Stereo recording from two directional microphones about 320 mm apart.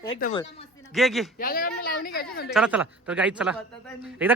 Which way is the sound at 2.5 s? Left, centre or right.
Centre.